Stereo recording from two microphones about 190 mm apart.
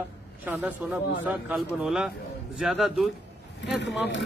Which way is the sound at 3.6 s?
65° left (ahead or behind).